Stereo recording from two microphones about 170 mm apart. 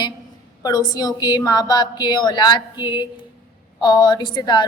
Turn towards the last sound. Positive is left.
turn(degrees=25)  # may be behind; listen again after turning